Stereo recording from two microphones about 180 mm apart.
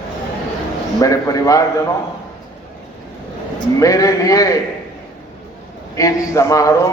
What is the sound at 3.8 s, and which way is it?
Speech, 20° left (ahead or behind).